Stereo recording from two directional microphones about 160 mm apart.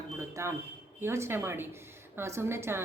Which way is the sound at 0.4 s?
20° right (ahead or behind).